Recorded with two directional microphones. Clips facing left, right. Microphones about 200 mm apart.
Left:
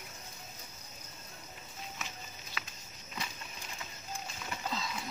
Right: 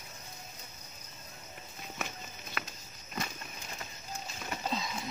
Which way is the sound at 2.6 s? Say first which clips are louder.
Right 5 dB; 55° right (ahead or behind).